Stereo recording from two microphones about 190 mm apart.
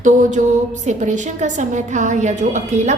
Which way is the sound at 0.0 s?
40° right (ahead or behind).